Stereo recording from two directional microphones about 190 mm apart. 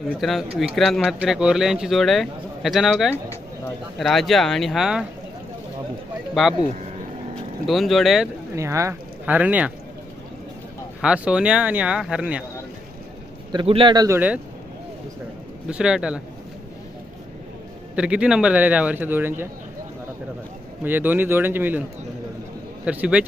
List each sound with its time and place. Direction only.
0.2 s speech: centre (ahead or behind)
6.4 s speech: centre (ahead or behind)
7.7 s speech: centre (ahead or behind)
8.5 s speech: 15° right (ahead or behind)
11.0 s speech: 5° right (ahead or behind)
13.5 s a man's voice: 25° right (ahead or behind)
15.6 s speech: 5° right (ahead or behind)
17.9 s a man's voice: 5° right (ahead or behind)
20.8 s a man's voice: 10° right (ahead or behind)
22.9 s a man's voice: 5° right (ahead or behind)